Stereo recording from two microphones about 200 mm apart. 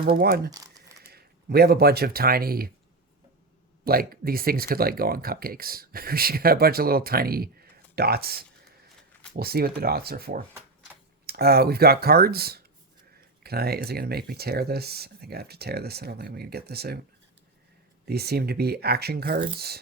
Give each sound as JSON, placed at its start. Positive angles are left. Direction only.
{"t": 0.2, "sound": "speech", "side_deg": -50}
{"t": 0.5, "sound": "crumpling", "side_deg": -20}
{"t": 1.0, "sound": "speech", "side_deg": -50}
{"t": 3.8, "sound": "speech", "side_deg": -45}
{"t": 18.0, "sound": "speech", "side_deg": -50}